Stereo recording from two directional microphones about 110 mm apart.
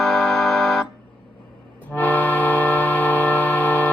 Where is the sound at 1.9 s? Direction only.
15° left (ahead or behind).